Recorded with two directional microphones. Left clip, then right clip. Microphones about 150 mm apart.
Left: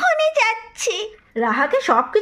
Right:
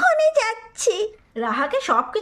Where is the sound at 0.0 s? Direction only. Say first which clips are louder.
Even; 55° right (ahead or behind).